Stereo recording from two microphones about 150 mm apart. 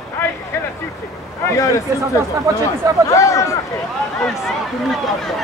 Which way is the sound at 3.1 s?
20° left (ahead or behind).